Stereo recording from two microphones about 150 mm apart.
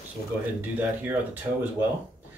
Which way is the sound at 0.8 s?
10° right (ahead or behind).